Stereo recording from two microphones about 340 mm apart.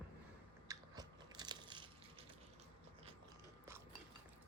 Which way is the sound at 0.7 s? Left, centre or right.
Centre.